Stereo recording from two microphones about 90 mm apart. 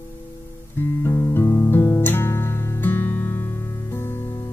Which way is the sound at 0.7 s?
25° left (ahead or behind).